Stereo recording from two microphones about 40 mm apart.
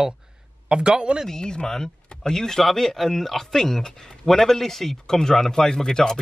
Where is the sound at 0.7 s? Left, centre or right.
Right.